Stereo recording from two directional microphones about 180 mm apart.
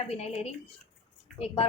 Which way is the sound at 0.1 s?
35° left (ahead or behind).